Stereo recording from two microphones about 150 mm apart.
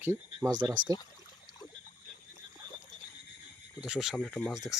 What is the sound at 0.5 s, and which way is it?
Speech, 30° right (ahead or behind).